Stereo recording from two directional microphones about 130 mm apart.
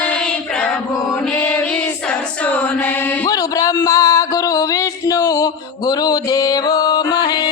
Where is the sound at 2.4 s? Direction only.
10° left (ahead or behind).